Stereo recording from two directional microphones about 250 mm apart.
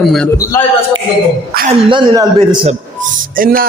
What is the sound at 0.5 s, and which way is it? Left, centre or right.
Speech, centre.